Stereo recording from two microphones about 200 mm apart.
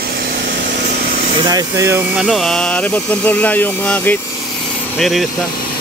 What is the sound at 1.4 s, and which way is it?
Speech, 15° right (ahead or behind).